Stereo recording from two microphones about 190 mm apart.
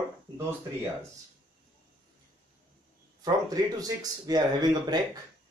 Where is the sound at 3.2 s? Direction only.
20° right (ahead or behind).